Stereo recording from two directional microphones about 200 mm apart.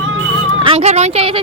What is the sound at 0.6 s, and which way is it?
Speech, 30° right (ahead or behind).